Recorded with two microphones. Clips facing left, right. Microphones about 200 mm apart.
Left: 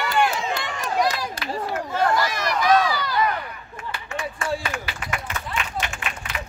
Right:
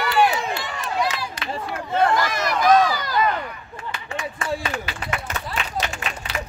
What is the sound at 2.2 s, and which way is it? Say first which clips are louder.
Run: right 2 dB; 50° right (ahead or behind).